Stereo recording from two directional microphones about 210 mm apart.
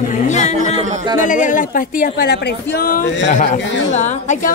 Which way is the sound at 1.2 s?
35° left (ahead or behind).